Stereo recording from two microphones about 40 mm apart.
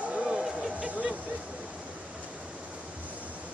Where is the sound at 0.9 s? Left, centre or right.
Right.